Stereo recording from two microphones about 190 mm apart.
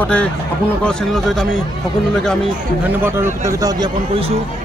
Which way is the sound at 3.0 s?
10° right (ahead or behind).